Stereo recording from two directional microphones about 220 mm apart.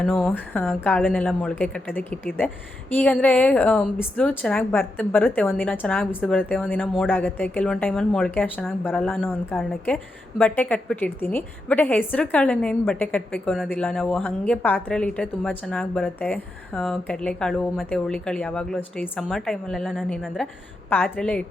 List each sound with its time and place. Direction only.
0.0 s a woman's voice: 5° left (ahead or behind)